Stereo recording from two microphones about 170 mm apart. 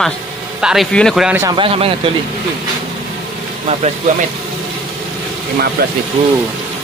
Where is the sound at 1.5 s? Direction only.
35° right (ahead or behind).